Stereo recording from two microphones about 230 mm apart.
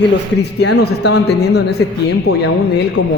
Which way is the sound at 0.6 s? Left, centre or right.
Left.